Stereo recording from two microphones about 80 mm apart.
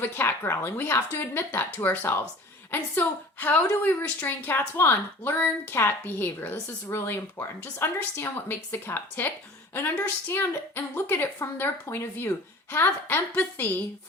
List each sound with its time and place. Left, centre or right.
0.0 s a woman's voice: left